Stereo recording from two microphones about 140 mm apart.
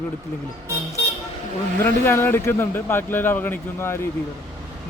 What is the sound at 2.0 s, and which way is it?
Speech, 15° left (ahead or behind).